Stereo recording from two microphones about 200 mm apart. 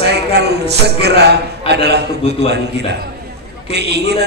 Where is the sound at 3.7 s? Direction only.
55° right (ahead or behind).